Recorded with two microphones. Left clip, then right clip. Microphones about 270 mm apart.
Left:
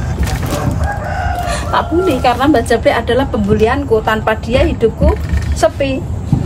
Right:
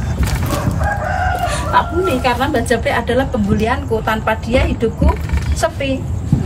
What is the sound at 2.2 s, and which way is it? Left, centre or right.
A woman's voice, centre.